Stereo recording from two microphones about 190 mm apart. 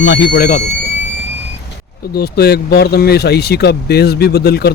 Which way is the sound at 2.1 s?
55° left (ahead or behind).